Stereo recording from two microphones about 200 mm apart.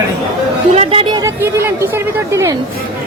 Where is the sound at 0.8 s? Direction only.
30° right (ahead or behind).